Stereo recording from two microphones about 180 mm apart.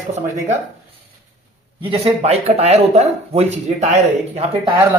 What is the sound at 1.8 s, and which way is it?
Speech, 35° right (ahead or behind).